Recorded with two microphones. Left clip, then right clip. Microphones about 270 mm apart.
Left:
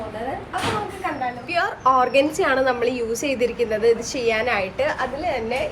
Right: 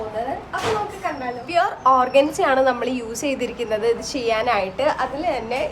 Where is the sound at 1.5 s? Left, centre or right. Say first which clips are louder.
Right 3 dB; centre.